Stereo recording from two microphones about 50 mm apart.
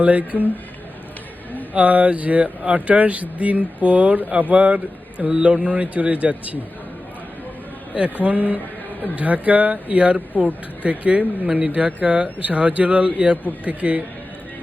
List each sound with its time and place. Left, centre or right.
0.0 s speech: right
1.7 s speech: right
8.2 s speech: right